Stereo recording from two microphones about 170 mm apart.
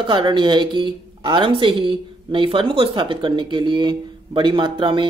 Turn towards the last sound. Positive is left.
turn(degrees=-30)  # may be behind; listen again after turning